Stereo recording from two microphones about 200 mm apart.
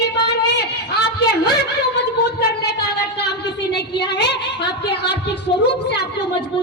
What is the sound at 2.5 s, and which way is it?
A woman's voice, 55° left (ahead or behind).